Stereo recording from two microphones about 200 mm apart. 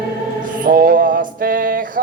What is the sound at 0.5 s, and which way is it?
Mantra, 45° right (ahead or behind).